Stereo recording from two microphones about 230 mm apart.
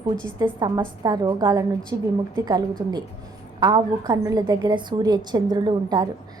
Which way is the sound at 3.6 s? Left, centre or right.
Centre.